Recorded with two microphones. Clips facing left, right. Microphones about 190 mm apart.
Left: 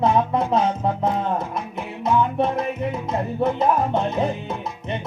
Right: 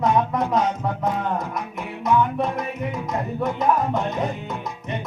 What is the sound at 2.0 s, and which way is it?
Music, 30° left (ahead or behind).